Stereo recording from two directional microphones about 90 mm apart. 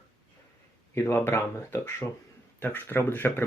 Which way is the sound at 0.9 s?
25° left (ahead or behind).